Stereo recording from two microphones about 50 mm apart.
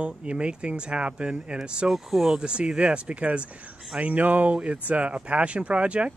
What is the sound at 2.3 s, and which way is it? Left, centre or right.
Speech, centre.